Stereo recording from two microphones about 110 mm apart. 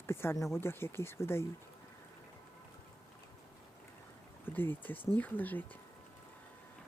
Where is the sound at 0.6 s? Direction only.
20° left (ahead or behind).